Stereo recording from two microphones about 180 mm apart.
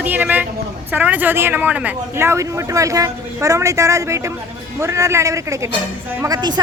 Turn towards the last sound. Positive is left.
turn(degrees=-20)  # may be behind; listen again after turning